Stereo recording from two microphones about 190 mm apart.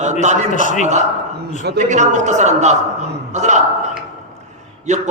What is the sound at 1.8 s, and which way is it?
A man's voice, 40° right (ahead or behind).